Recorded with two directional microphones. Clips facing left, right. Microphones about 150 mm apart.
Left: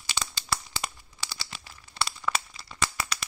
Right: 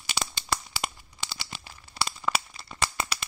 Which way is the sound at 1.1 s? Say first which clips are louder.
Right 2 dB; 25° right (ahead or behind).